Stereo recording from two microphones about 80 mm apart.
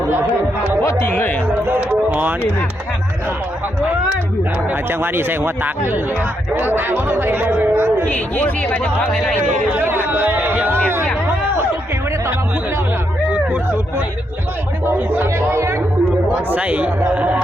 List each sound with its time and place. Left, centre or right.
0.9 s speech: left
1.1 s speech: left
1.5 s music: right
4.7 s a man's voice: right
8.0 s speech: left
9.7 s a sound: right
13.3 s a sound: centre
14.8 s music: right
16.5 s speech: centre